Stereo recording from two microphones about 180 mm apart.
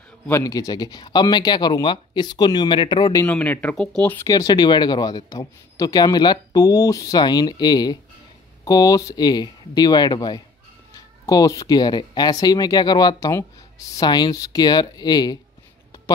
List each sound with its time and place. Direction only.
0.3 s speech: 20° left (ahead or behind)
3.3 s speech: 5° left (ahead or behind)